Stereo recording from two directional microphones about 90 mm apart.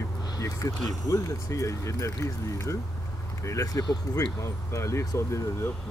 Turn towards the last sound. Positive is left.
turn(degrees=30)  # may be behind; listen again after turning